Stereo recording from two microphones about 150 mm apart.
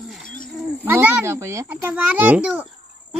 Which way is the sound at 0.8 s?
10° right (ahead or behind).